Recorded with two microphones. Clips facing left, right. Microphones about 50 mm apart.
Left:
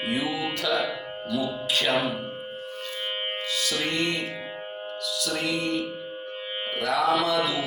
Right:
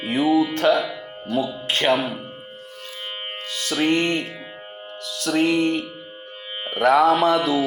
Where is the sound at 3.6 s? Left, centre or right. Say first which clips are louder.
Right 8 dB; right.